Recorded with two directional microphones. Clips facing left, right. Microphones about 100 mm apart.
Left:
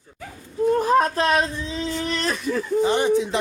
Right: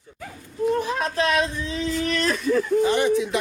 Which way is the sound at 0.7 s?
45° left (ahead or behind).